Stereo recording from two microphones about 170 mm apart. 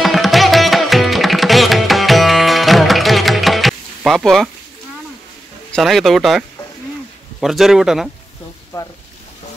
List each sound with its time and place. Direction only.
0.0 s music: centre (ahead or behind)
5.7 s speech: centre (ahead or behind)
8.7 s speech: 20° left (ahead or behind)